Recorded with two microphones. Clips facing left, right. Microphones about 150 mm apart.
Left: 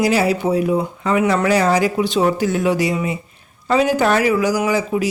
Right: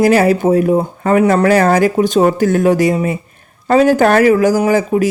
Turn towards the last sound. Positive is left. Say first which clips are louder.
# right 6 dB
turn(degrees=-50)  # may be behind; listen again after turning